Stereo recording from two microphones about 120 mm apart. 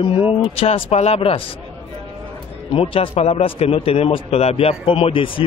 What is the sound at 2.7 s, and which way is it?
A man's voice, 50° left (ahead or behind).